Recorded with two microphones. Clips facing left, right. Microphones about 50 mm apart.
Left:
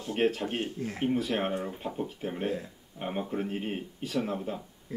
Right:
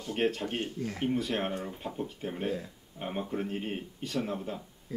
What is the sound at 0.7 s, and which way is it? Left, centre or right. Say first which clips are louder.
Speech: even; left.